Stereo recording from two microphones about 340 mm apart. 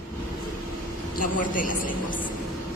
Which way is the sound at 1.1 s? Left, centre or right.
Left.